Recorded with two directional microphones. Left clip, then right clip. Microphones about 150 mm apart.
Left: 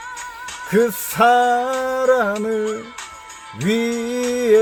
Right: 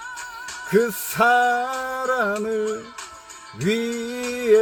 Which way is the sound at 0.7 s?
15° left (ahead or behind).